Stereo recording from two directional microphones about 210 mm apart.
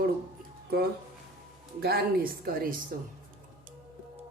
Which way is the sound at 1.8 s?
50° right (ahead or behind).